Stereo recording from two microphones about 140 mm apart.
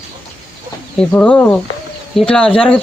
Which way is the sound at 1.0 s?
10° left (ahead or behind).